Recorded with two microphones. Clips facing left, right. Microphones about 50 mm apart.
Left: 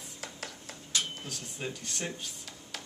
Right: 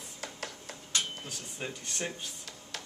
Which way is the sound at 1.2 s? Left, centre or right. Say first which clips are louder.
Left 1 dB; centre.